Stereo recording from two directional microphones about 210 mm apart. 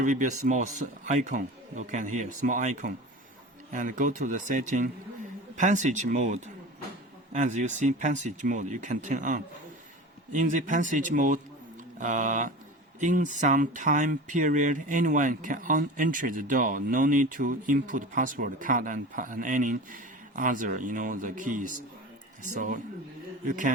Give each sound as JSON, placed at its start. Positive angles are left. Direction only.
{"t": 0.0, "sound": "speech", "side_deg": -35}